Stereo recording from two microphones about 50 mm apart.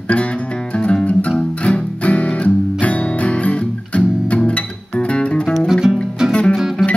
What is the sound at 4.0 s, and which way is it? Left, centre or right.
Music, centre.